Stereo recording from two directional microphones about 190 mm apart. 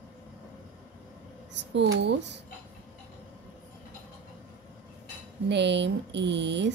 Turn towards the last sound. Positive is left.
turn(degrees=-65)  # may be behind; listen again after turning